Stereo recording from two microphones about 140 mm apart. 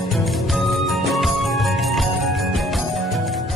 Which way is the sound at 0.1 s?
Centre (ahead or behind).